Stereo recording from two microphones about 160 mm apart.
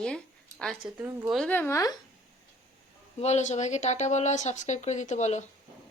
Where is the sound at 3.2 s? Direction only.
45° left (ahead or behind).